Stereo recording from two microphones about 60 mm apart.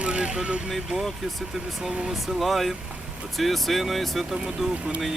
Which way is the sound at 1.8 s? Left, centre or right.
Centre.